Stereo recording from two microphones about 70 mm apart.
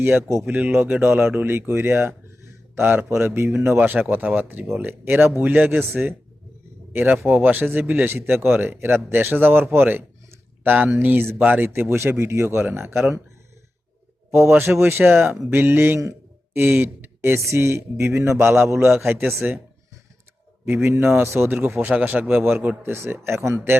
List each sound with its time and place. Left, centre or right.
0.0 s speech: right
0.4 s a man's voice: centre
14.3 s a man's voice: right
20.7 s a man's voice: right